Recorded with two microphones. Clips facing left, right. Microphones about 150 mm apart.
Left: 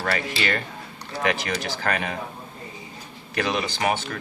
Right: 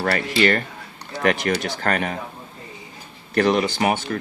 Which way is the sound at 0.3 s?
50° right (ahead or behind).